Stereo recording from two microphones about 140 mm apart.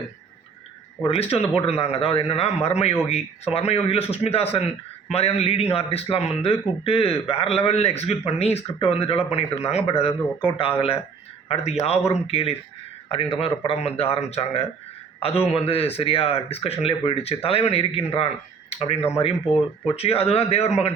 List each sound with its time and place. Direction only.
1.0 s a man's voice: 45° left (ahead or behind)